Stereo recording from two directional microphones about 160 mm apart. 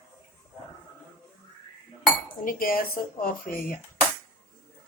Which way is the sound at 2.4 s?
65° left (ahead or behind).